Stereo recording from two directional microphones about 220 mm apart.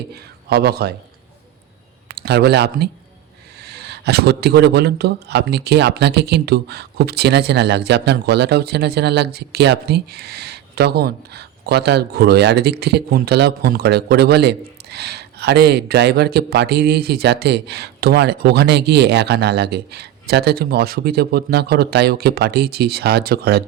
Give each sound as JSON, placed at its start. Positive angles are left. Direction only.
{"t": 0.1, "sound": "speech", "side_deg": -45}
{"t": 2.0, "sound": "a man's voice", "side_deg": -45}